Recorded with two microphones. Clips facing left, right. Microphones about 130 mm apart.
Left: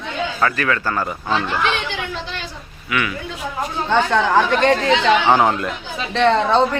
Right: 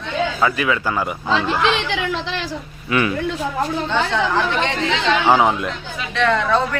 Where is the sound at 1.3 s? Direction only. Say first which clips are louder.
Right 2 dB; 90° right.